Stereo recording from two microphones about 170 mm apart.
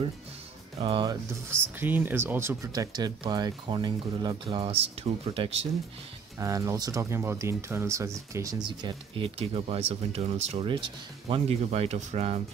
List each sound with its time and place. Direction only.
0.7 s speech: 30° right (ahead or behind)
1.5 s speech: 10° right (ahead or behind); by 5.7 s 35° right (ahead or behind)
6.4 s speech: 20° right (ahead or behind); by 12.4 s 40° right (ahead or behind)